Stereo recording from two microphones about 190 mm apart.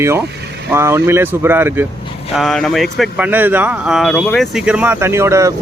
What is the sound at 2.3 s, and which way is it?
Speech, centre (ahead or behind).